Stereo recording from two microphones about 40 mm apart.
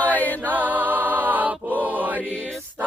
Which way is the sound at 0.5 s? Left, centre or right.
Right.